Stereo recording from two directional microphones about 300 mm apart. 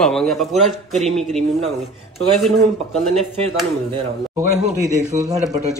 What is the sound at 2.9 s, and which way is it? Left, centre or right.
Speech, centre.